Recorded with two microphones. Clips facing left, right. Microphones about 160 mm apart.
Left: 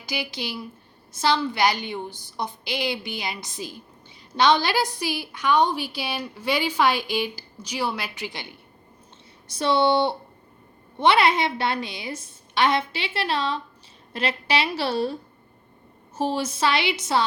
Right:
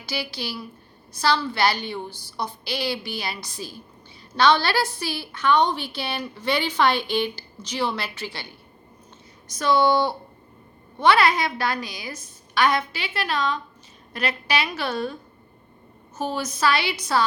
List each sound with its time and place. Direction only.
0.0 s a woman's voice: 15° left (ahead or behind)
9.5 s a woman's voice: 30° left (ahead or behind)